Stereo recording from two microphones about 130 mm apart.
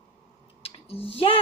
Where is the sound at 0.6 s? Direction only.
45° left (ahead or behind).